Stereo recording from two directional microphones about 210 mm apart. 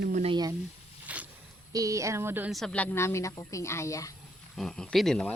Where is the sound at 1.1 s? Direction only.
5° right (ahead or behind).